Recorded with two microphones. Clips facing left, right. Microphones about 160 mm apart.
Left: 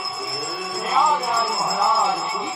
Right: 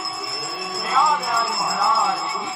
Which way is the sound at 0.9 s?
15° left (ahead or behind).